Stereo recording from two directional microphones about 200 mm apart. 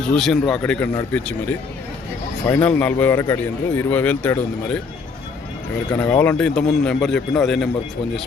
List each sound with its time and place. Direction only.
0.1 s a man's voice: centre (ahead or behind)
5.9 s speech: 10° left (ahead or behind)